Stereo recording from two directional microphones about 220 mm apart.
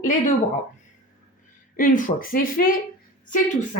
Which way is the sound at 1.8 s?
35° left (ahead or behind).